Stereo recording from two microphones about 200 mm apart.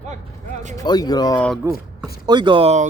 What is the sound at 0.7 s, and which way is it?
Speech, 20° left (ahead or behind).